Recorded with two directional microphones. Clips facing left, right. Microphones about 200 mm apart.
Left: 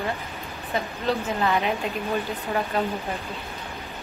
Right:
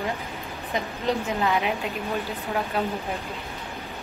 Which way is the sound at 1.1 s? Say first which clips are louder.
Even; 15° right (ahead or behind).